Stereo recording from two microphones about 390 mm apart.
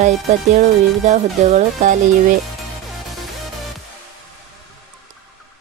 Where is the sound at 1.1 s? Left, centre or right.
Centre.